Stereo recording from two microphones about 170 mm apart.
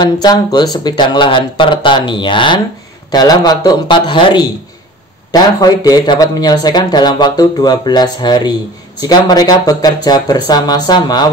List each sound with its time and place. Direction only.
0.0 s speech: 25° left (ahead or behind)